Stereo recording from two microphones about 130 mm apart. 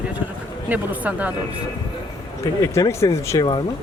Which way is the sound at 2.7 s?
20° left (ahead or behind).